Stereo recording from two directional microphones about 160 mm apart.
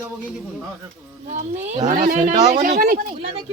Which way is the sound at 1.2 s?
45° right (ahead or behind).